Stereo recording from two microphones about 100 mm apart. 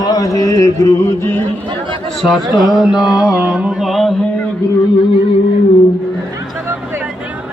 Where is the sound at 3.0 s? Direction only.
45° left (ahead or behind).